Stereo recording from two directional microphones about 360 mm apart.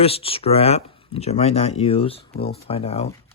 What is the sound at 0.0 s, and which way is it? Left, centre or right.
Speech, centre.